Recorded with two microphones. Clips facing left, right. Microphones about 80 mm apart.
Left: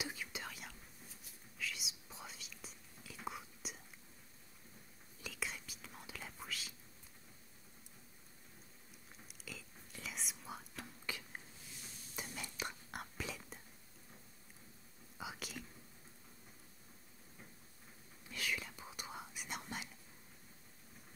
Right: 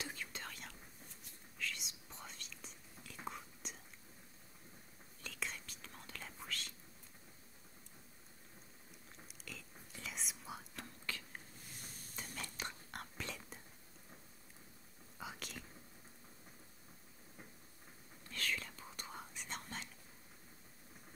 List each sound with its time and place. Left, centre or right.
0.0 s whispering: centre
5.2 s whispering: centre
9.4 s whispering: centre
11.1 s a sound: centre
11.7 s stir: right
12.4 s whispering: centre
15.1 s whispering: centre
18.2 s whispering: centre